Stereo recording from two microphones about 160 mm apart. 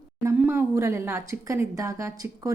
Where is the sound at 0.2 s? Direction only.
15° right (ahead or behind).